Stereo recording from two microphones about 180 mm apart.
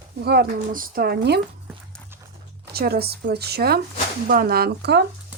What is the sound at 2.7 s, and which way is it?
Speech, 60° right (ahead or behind).